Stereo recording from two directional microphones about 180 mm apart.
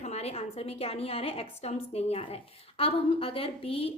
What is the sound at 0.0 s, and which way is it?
A woman's voice, 35° left (ahead or behind).